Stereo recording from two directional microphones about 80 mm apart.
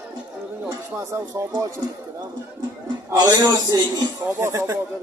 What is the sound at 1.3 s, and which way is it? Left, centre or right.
Speech, right.